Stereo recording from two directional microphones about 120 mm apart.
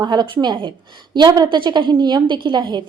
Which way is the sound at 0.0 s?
35° right (ahead or behind).